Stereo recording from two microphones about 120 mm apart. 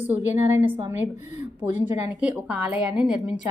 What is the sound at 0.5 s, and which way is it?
Speech, 20° right (ahead or behind).